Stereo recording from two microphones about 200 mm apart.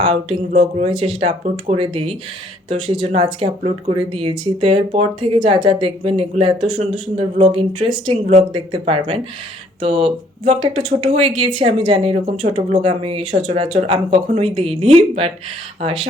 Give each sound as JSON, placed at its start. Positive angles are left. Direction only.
{"t": 0.0, "sound": "speech", "side_deg": -25}